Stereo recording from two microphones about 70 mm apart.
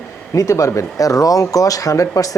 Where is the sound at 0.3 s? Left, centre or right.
Left.